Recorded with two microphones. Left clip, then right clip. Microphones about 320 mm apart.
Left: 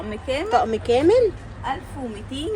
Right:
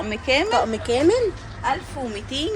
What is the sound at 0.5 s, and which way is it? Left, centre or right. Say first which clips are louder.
Speech: left 2 dB; centre.